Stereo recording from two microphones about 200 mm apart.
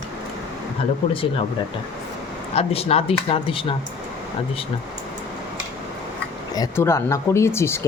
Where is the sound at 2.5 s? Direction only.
30° left (ahead or behind).